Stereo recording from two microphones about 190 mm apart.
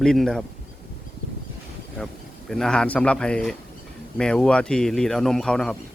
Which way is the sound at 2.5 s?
5° left (ahead or behind).